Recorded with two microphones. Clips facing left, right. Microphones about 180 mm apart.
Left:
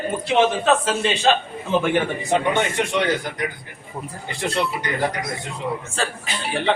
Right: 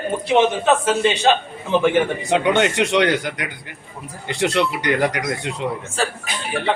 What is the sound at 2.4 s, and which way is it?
Speech, 90° right.